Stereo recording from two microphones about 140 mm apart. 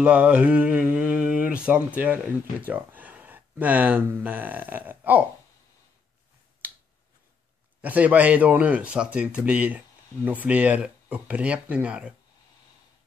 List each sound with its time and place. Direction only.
0.0 s speech: 10° right (ahead or behind)
7.8 s speech: 10° right (ahead or behind)